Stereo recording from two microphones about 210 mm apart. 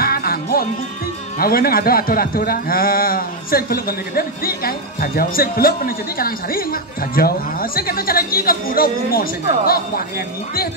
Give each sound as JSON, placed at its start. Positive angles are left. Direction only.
{"t": 0.0, "sound": "music", "side_deg": 45}
{"t": 1.4, "sound": "speech", "side_deg": 45}